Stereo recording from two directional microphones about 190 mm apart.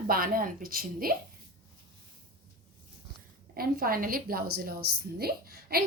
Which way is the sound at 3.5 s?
50° right (ahead or behind).